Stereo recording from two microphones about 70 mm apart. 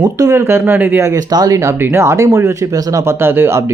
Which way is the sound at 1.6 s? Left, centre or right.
Right.